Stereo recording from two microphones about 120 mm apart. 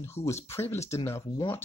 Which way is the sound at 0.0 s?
20° left (ahead or behind).